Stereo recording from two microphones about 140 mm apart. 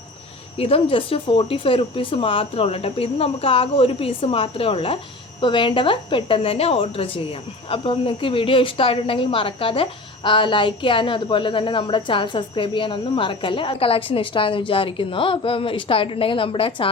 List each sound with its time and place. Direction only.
0.6 s a woman's voice: 40° left (ahead or behind)